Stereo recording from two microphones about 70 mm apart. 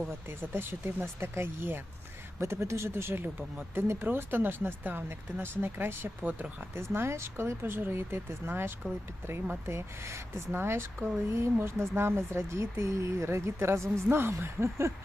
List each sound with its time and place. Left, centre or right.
0.1 s speech: right